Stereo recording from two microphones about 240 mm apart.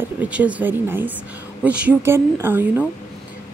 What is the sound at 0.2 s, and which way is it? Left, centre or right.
A woman's voice, centre.